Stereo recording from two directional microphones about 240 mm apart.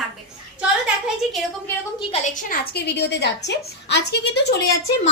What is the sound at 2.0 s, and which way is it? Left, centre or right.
A woman's voice, left.